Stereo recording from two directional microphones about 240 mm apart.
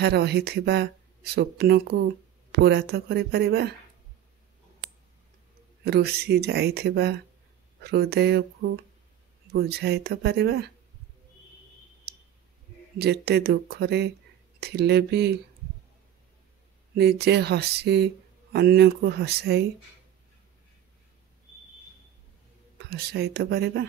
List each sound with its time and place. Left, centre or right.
0.0 s speech: right
5.9 s speech: right
13.0 s speech: right
16.9 s speech: right
22.8 s speech: right